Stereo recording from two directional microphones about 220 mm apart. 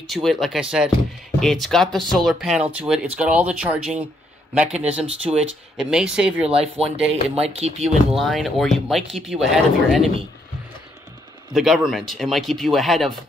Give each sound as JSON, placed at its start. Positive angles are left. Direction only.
{"t": 0.0, "sound": "speech", "side_deg": 0}
{"t": 7.4, "sound": "speech", "side_deg": -30}
{"t": 8.2, "sound": "speech", "side_deg": 0}
{"t": 11.5, "sound": "speech", "side_deg": 0}